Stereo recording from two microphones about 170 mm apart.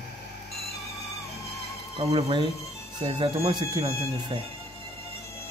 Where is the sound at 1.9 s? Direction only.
30° right (ahead or behind).